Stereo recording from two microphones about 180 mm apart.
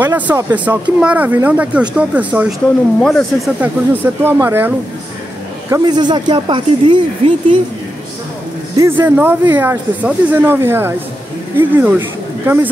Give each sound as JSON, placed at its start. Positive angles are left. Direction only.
{"t": 0.0, "sound": "speech", "side_deg": -10}
{"t": 3.0, "sound": "speech", "side_deg": 0}
{"t": 3.6, "sound": "speech", "side_deg": -10}
{"t": 5.7, "sound": "speech", "side_deg": -25}
{"t": 8.7, "sound": "speech", "side_deg": -15}